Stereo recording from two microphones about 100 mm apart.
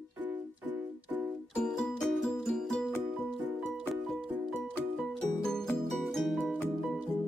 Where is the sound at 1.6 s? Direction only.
Centre (ahead or behind).